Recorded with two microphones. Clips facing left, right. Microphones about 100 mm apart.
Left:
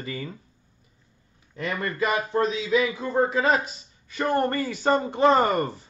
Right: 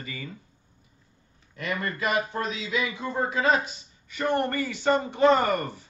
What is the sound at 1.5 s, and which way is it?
A man's voice, 30° left (ahead or behind).